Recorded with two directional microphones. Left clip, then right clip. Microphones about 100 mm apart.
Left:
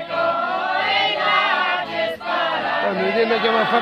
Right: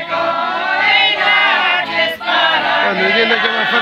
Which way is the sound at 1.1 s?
15° right (ahead or behind).